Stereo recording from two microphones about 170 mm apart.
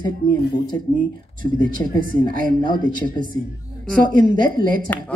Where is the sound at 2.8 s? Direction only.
55° right (ahead or behind).